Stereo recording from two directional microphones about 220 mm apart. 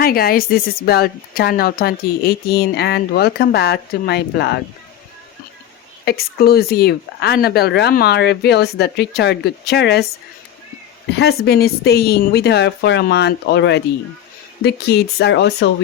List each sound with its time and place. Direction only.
0.0 s speech: 45° left (ahead or behind)
6.1 s speech: 45° left (ahead or behind)
11.2 s speech: 45° left (ahead or behind)